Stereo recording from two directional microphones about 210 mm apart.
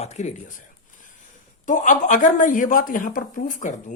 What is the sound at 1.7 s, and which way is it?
Speech, 35° left (ahead or behind).